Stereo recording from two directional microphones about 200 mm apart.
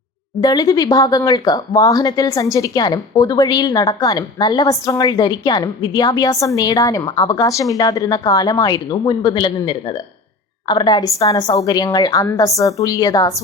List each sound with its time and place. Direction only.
0.4 s a woman's voice: 20° left (ahead or behind)